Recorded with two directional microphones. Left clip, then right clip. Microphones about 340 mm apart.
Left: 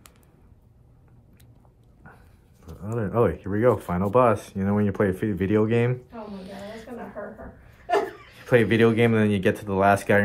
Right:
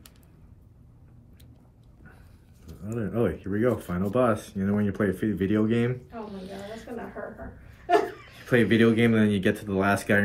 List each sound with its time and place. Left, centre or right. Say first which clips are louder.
2.8 s speech: left 5 dB; centre
8.4 s speech: left 3 dB; left